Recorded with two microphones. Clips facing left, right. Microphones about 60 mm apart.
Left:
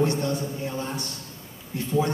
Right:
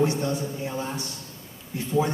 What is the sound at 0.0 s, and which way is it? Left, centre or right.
A man's voice, centre.